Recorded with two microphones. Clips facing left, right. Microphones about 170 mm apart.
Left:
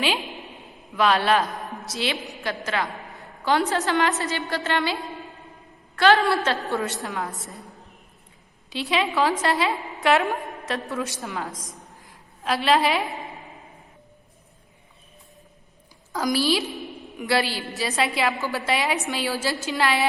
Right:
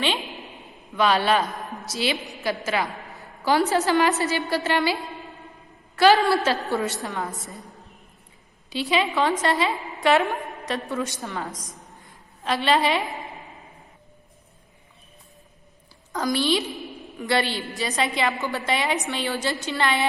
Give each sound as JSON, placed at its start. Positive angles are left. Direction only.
{"t": 0.9, "sound": "a woman's voice", "side_deg": 0}
{"t": 8.7, "sound": "a woman's voice", "side_deg": 0}
{"t": 11.6, "sound": "a sound", "side_deg": 0}
{"t": 16.1, "sound": "a woman's voice", "side_deg": 0}